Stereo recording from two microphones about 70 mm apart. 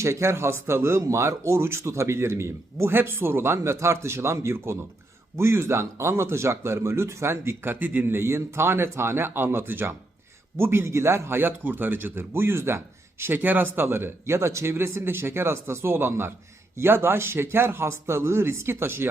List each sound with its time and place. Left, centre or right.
0.0 s a man's voice: right